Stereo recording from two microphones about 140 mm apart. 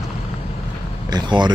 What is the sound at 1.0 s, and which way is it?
Speech, 30° right (ahead or behind).